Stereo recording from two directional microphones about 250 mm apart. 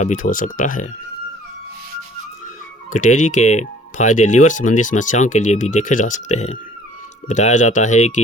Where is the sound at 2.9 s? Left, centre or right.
Left.